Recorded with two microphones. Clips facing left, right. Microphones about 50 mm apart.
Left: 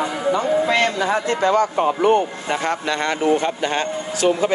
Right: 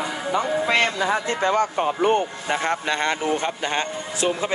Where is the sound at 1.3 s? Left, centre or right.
Right.